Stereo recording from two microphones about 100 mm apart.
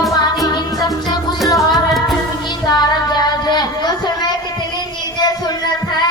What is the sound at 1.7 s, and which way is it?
Music, centre (ahead or behind).